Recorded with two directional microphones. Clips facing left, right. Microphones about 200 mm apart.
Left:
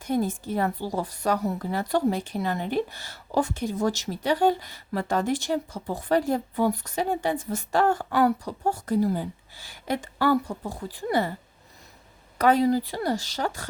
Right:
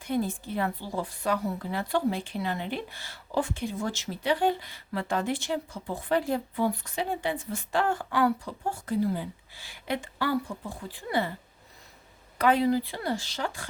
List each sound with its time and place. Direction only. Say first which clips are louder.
0.0 s a woman's voice: left 3 dB; 40° left (ahead or behind)
12.4 s a woman's voice: left 3 dB; 40° left (ahead or behind)